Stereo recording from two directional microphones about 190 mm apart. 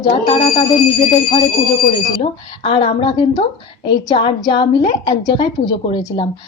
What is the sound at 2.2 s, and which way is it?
A woman's voice, 30° left (ahead or behind).